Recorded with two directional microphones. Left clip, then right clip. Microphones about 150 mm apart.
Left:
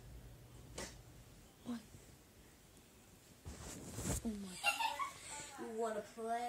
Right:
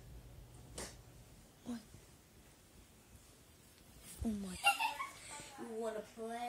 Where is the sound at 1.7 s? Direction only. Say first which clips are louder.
Even; 5° right (ahead or behind).